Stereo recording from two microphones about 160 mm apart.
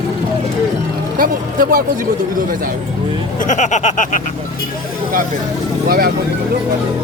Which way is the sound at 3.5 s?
50° left (ahead or behind).